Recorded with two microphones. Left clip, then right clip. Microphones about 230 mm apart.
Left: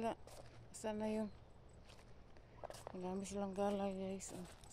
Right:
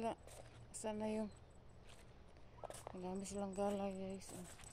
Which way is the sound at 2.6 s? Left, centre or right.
Centre.